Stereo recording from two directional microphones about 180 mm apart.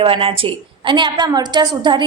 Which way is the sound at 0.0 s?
30° right (ahead or behind).